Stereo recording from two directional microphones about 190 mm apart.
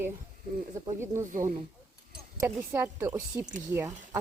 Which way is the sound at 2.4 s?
10° right (ahead or behind).